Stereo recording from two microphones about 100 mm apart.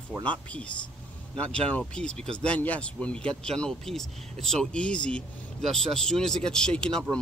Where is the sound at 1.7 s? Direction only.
10° left (ahead or behind).